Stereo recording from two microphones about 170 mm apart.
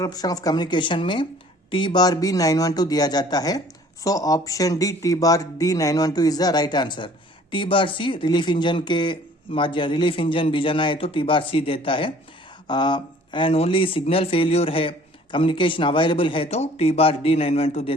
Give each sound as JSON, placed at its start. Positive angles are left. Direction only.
{"t": 0.0, "sound": "speech", "side_deg": 20}